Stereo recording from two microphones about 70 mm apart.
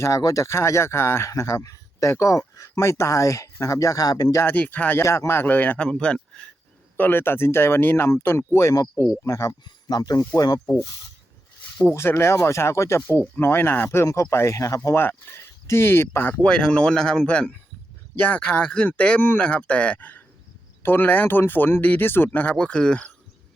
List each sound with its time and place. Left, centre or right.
0.2 s speech: left
0.4 s speech: left
1.3 s speech: left
4.4 s speech: left
5.0 s speech: left; by 6.5 s centre
6.9 s speech: left
9.0 s speech: left
9.6 s speech: left
11.9 s speech: left
14.0 s speech: left
14.9 s speech: left
16.4 s speech: centre; by 22.5 s left
22.5 s speech: centre